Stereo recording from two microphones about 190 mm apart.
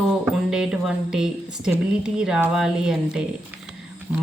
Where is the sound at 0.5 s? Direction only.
5° right (ahead or behind).